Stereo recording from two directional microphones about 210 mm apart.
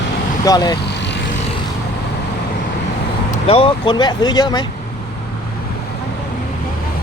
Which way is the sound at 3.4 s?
25° left (ahead or behind).